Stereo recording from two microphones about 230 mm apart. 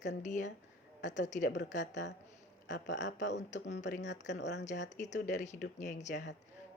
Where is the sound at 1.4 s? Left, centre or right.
Left.